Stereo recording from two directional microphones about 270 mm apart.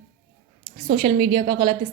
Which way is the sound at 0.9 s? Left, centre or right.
Centre.